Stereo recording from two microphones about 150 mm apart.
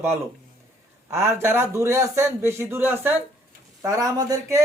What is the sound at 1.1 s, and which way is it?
A man's voice, 15° right (ahead or behind).